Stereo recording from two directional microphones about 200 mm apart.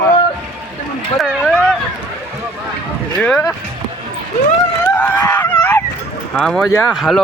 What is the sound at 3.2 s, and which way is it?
Speech, 10° left (ahead or behind).